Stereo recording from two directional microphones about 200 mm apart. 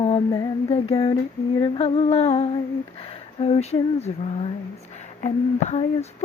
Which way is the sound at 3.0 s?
30° left (ahead or behind).